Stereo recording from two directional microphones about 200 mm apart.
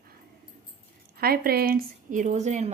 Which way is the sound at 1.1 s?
50° right (ahead or behind).